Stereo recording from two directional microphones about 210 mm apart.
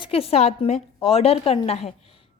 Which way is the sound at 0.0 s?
25° left (ahead or behind).